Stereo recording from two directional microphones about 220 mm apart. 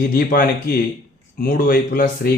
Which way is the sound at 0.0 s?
40° left (ahead or behind).